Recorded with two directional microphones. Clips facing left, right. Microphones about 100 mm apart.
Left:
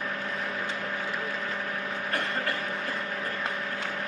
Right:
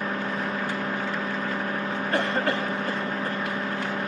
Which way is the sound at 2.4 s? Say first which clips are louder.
Right 5 dB; 30° right (ahead or behind).